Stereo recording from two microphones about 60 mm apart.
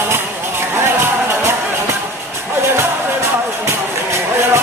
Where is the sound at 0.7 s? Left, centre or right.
Right.